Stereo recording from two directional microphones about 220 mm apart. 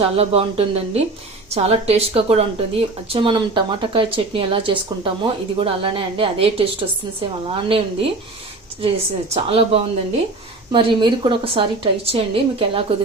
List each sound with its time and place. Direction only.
0.0 s speech: 25° right (ahead or behind)
9.3 s speech: 25° right (ahead or behind)